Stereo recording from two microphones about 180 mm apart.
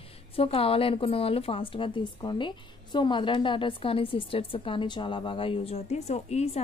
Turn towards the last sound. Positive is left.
turn(degrees=35)  # may be behind; listen again after turning